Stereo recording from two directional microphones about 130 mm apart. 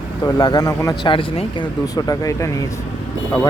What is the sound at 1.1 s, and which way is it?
Speech, 40° left (ahead or behind).